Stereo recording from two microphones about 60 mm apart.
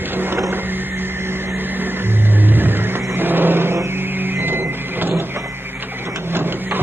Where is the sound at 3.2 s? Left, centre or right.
Right.